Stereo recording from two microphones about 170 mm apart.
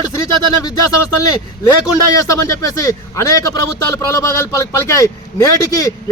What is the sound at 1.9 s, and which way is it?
A man's voice, 20° left (ahead or behind).